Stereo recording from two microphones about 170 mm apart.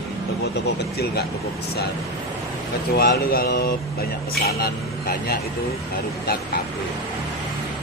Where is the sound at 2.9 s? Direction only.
60° left (ahead or behind).